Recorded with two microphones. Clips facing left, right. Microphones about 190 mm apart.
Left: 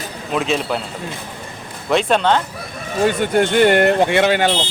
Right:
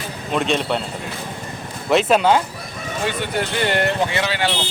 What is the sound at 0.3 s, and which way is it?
Speech, centre (ahead or behind).